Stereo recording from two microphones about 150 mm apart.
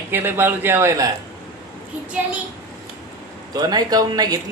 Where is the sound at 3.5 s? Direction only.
25° right (ahead or behind).